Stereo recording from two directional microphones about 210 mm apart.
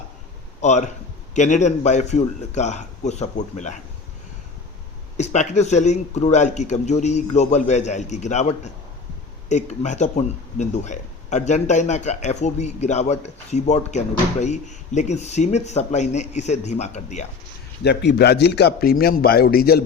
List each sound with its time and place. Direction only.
0.6 s a man's voice: 35° left (ahead or behind)
5.1 s speech: 35° left (ahead or behind)
17.8 s a man's voice: 55° left (ahead or behind)